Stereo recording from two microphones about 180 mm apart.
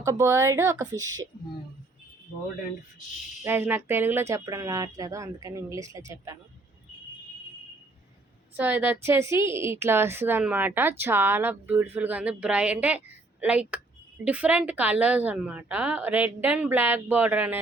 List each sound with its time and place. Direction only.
0.0 s a woman's voice: 15° right (ahead or behind)
3.4 s a woman's voice: 15° right (ahead or behind)
8.5 s a woman's voice: 10° right (ahead or behind)